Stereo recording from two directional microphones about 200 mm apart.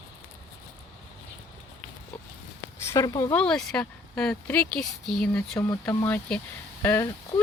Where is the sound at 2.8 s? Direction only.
15° left (ahead or behind).